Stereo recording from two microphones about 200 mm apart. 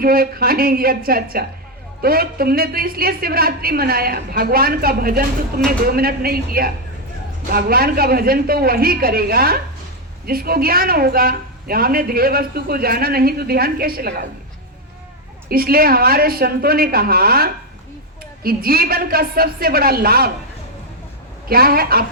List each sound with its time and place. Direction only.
0.0 s a woman's voice: 45° right (ahead or behind)
15.4 s a woman's voice: 50° right (ahead or behind)
21.5 s a woman's voice: 50° right (ahead or behind)